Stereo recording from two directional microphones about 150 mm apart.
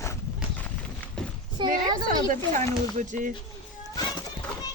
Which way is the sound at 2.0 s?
65° right (ahead or behind).